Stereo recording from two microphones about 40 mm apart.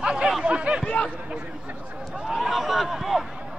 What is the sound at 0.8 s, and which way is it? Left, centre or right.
Speech, left.